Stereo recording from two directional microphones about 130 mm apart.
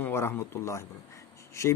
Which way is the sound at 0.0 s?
20° left (ahead or behind).